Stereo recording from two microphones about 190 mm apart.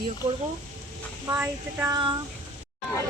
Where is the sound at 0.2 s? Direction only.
35° right (ahead or behind).